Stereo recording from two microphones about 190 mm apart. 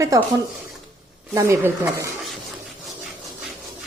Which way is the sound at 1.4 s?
15° right (ahead or behind).